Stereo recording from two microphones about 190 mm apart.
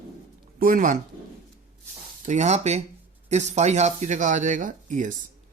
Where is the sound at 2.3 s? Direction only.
35° right (ahead or behind).